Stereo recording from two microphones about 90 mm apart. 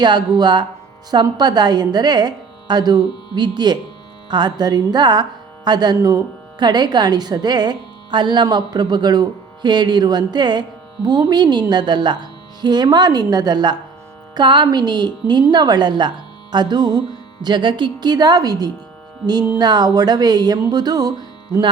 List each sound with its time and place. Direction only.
0.0 s a woman's voice: 50° right (ahead or behind)